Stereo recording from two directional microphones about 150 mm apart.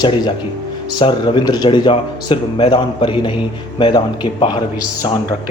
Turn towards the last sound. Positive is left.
turn(degrees=30)  # may be behind; listen again after turning